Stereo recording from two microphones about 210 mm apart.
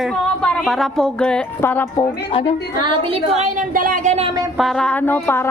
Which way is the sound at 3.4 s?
35° right (ahead or behind).